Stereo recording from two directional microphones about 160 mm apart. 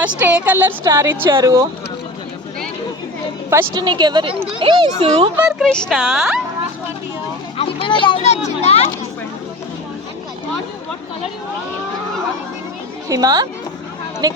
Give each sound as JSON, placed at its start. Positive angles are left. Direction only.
{"t": 0.2, "sound": "speech", "side_deg": -10}
{"t": 3.5, "sound": "speech", "side_deg": -15}
{"t": 3.8, "sound": "speech", "side_deg": -30}
{"t": 5.4, "sound": "a woman's voice", "side_deg": -5}
{"t": 7.6, "sound": "speech", "side_deg": 30}
{"t": 13.1, "sound": "speech", "side_deg": -20}